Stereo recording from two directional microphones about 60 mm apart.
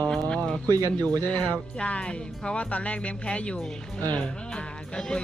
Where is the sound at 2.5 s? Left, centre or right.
Left.